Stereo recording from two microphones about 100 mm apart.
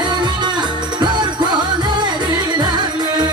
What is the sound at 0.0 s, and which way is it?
Music, 45° right (ahead or behind).